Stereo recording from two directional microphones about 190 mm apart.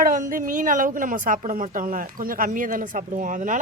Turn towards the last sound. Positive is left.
turn(degrees=-45)  # may be behind; listen again after turning